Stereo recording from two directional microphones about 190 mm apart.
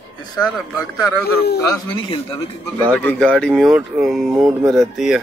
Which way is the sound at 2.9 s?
10° left (ahead or behind).